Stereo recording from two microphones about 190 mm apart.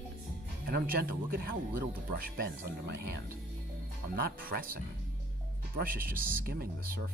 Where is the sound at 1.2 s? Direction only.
50° right (ahead or behind).